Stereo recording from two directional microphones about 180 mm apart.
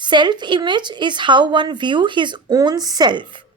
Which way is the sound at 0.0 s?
25° right (ahead or behind).